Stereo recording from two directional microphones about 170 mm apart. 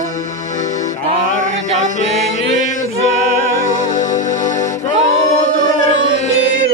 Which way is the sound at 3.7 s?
45° left (ahead or behind).